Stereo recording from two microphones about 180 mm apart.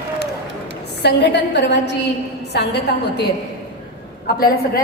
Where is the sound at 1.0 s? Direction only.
70° left (ahead or behind).